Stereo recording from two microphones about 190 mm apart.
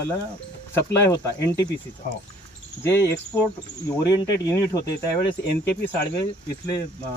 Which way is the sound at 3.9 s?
15° left (ahead or behind).